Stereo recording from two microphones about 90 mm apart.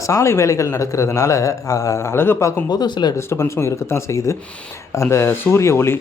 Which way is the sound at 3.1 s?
30° left (ahead or behind).